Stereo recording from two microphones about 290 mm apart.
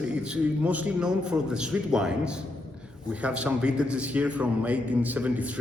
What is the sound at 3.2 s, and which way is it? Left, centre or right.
A man's voice, centre.